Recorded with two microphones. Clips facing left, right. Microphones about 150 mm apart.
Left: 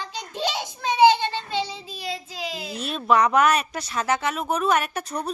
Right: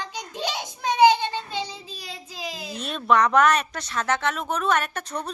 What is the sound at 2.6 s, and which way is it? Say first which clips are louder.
Speech: even; 5° left (ahead or behind).